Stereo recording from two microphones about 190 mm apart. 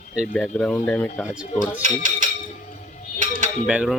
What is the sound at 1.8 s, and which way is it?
Speech, 40° right (ahead or behind).